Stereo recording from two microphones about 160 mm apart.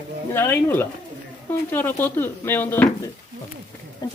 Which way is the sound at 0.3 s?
15° left (ahead or behind).